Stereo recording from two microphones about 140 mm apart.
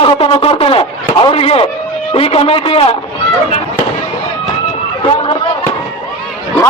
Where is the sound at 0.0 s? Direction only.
40° left (ahead or behind).